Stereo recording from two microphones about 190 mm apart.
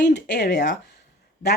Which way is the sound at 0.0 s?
60° left (ahead or behind).